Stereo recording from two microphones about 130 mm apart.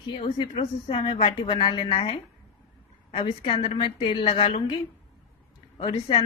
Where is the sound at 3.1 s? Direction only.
45° left (ahead or behind).